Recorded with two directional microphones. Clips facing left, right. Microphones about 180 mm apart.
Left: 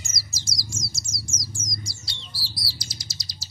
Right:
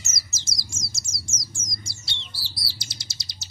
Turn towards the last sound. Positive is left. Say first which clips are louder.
# left 3 dB
turn(degrees=-25)  # may be behind; listen again after turning